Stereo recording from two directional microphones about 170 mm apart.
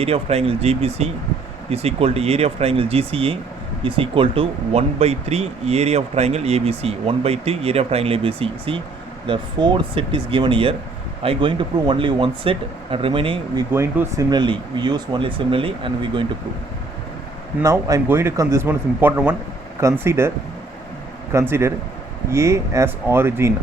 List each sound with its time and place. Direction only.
0.0 s speech: 35° right (ahead or behind)
13.7 s speech: 15° right (ahead or behind)
17.6 s speech: 20° right (ahead or behind)
21.3 s speech: 15° right (ahead or behind)